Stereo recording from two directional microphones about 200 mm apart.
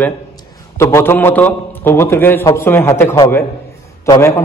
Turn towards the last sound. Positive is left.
turn(degrees=15)  # may be behind; listen again after turning